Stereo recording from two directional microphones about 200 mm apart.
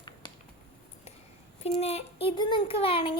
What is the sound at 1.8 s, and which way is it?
A child's voice, 30° left (ahead or behind).